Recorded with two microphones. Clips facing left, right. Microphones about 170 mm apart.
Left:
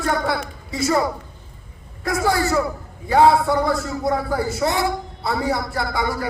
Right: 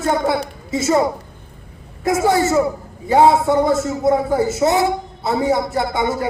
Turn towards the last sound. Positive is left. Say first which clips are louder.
# right 4 dB
turn(degrees=-20)  # may be behind; listen again after turning